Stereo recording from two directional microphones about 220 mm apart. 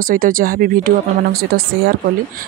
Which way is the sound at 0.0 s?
40° right (ahead or behind).